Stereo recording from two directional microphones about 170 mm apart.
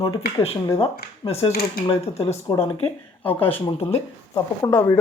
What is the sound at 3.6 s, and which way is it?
Speech, 35° left (ahead or behind).